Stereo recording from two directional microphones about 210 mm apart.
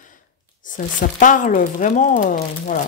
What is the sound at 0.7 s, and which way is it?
Speech, 40° left (ahead or behind).